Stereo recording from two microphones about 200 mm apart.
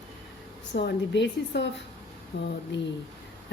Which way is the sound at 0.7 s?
60° left (ahead or behind).